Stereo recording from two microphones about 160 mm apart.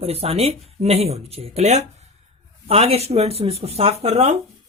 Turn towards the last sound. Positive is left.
turn(degrees=-45)  # may be behind; listen again after turning